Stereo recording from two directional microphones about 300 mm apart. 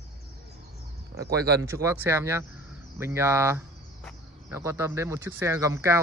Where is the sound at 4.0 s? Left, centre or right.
Centre.